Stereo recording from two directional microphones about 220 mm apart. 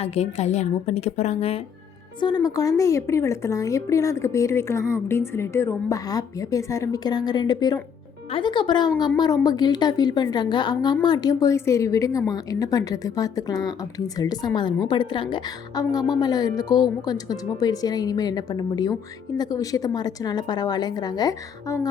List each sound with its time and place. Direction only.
0.0 s a woman's voice: 30° left (ahead or behind)
2.2 s speech: 15° left (ahead or behind)